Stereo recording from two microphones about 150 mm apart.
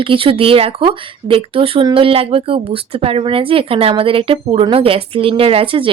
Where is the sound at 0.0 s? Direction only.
35° right (ahead or behind).